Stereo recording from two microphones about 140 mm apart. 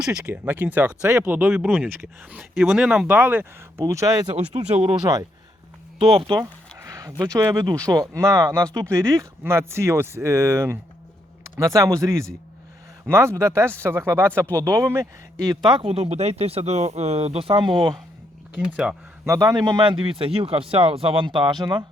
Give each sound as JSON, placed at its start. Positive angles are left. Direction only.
{"t": 0.0, "sound": "speech", "side_deg": -10}
{"t": 2.6, "sound": "speech", "side_deg": -5}
{"t": 4.5, "sound": "speech", "side_deg": -50}
{"t": 6.1, "sound": "speech", "side_deg": -35}
{"t": 6.4, "sound": "speech", "side_deg": -20}
{"t": 15.8, "sound": "speech", "side_deg": -45}
{"t": 18.5, "sound": "speech", "side_deg": -5}
{"t": 19.2, "sound": "speech", "side_deg": -25}